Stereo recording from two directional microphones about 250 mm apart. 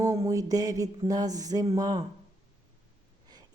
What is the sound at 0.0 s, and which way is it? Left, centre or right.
Speech, centre.